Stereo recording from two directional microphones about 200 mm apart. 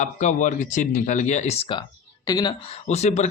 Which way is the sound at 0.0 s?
40° left (ahead or behind).